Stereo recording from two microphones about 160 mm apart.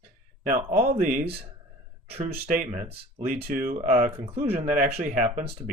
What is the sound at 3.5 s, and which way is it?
Speech, 45° right (ahead or behind).